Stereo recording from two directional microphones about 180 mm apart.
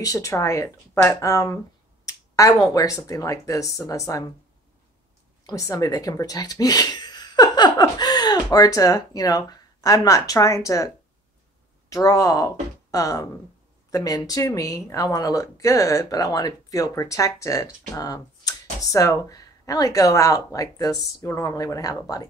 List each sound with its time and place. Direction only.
0.0 s speech: 20° left (ahead or behind)
5.5 s speech: 20° left (ahead or behind)
11.9 s a woman's voice: 20° left (ahead or behind)